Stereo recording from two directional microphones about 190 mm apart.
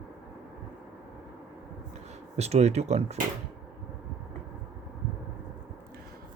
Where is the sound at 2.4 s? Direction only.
35° right (ahead or behind).